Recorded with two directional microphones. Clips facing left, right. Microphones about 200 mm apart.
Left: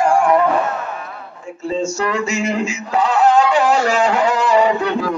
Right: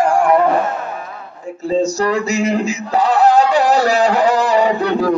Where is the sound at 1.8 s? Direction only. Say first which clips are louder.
Right 3 dB; 35° right (ahead or behind).